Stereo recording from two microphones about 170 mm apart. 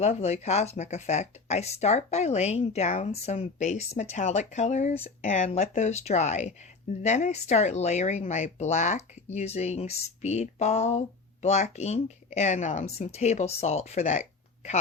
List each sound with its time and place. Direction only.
0.0 s speech: 40° left (ahead or behind)